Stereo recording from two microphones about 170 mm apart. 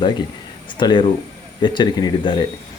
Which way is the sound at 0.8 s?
30° left (ahead or behind).